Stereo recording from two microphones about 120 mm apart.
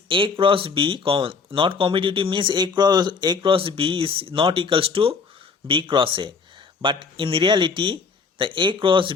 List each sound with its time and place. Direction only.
0.1 s speech: 45° right (ahead or behind)